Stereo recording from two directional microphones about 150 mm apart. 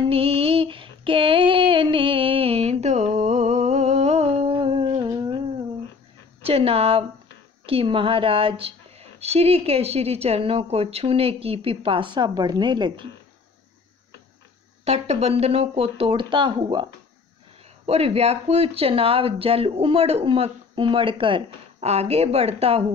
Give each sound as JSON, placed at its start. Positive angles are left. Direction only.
{"t": 0.1, "sound": "female singing", "side_deg": -40}
{"t": 6.4, "sound": "a woman's voice", "side_deg": -40}
{"t": 14.9, "sound": "a woman's voice", "side_deg": -45}
{"t": 17.8, "sound": "a woman's voice", "side_deg": -45}